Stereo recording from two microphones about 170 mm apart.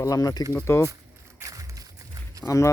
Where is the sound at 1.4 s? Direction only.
20° right (ahead or behind).